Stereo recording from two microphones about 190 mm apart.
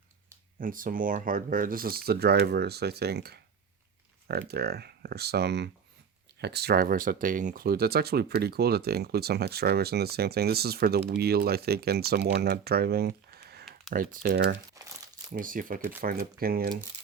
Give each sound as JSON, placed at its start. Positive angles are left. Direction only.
{"t": 0.6, "sound": "speech", "side_deg": -45}
{"t": 15.4, "sound": "speech", "side_deg": -45}